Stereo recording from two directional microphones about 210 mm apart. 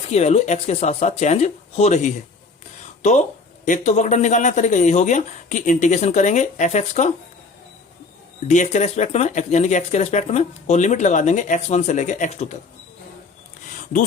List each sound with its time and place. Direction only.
0.1 s speech: 30° left (ahead or behind)
8.4 s speech: 35° left (ahead or behind)
13.7 s a sound: 40° left (ahead or behind)